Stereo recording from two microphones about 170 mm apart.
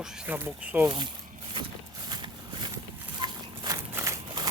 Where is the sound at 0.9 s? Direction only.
30° right (ahead or behind).